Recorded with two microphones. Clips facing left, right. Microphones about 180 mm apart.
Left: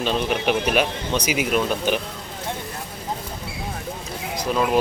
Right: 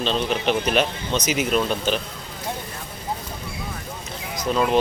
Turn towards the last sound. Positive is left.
turn(degrees=5)  # may be behind; listen again after turning